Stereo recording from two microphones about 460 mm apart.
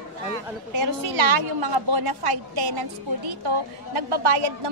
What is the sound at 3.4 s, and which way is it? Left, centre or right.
A woman's voice, right.